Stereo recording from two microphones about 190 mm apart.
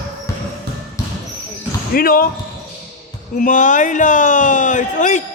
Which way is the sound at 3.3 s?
45° left (ahead or behind).